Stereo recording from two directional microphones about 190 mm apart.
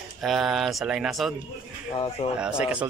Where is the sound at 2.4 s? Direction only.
5° right (ahead or behind).